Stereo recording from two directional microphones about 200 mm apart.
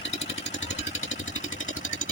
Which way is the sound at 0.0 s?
30° left (ahead or behind).